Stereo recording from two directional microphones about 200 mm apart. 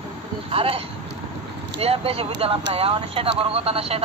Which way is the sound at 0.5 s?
30° right (ahead or behind).